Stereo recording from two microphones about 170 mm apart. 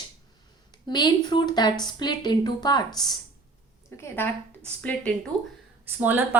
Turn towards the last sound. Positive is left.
turn(degrees=-10)  # may be behind; listen again after turning